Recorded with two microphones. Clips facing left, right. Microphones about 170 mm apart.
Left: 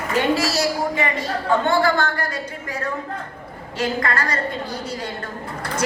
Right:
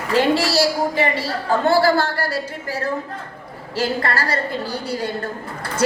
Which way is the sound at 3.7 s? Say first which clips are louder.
Right 1 dB; 35° right (ahead or behind).